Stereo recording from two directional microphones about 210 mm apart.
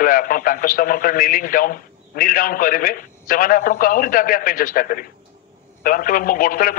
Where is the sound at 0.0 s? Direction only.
40° left (ahead or behind).